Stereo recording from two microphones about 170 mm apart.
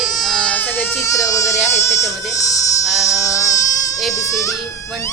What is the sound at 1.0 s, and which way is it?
Speech, 20° left (ahead or behind).